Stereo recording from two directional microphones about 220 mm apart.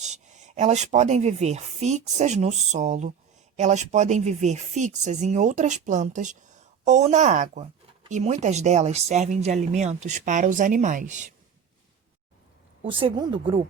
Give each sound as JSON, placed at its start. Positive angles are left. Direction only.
{"t": 0.0, "sound": "speech", "side_deg": -30}
{"t": 12.8, "sound": "speech", "side_deg": -25}